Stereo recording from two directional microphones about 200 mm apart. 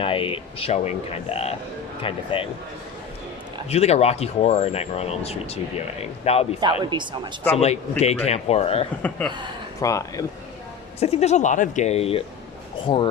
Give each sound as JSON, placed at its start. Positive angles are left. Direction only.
{"t": 0.0, "sound": "speech", "side_deg": 25}
{"t": 3.7, "sound": "speech", "side_deg": 30}
{"t": 6.9, "sound": "speech", "side_deg": -25}
{"t": 7.5, "sound": "speech", "side_deg": 30}
{"t": 9.0, "sound": "speech", "side_deg": 5}
{"t": 11.0, "sound": "speech", "side_deg": 30}